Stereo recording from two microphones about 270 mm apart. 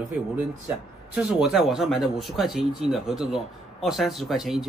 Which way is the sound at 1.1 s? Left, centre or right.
Centre.